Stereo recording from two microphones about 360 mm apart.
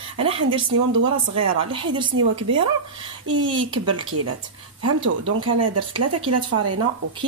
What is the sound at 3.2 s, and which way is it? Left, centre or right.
A woman's voice, right.